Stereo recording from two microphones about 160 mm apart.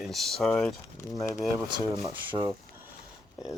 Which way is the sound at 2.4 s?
15° right (ahead or behind).